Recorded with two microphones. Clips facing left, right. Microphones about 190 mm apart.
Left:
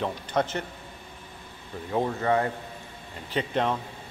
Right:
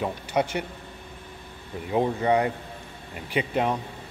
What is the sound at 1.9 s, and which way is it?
Speech, 15° right (ahead or behind).